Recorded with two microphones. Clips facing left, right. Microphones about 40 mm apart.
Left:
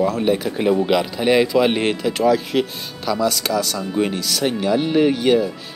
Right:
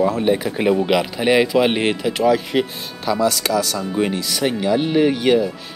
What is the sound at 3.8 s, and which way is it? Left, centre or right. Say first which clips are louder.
Speech: right 1 dB; centre.